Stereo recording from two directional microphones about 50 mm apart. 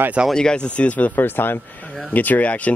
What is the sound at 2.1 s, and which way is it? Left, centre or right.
Speech, left.